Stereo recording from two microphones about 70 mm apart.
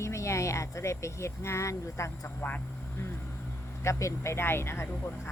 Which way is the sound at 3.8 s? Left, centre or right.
Left.